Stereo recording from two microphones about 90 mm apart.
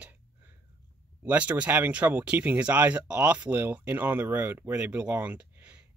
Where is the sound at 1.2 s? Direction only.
15° right (ahead or behind).